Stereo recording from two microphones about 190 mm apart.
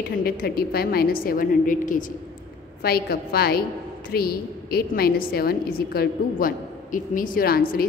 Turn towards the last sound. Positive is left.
turn(degrees=50)  # may be behind; listen again after turning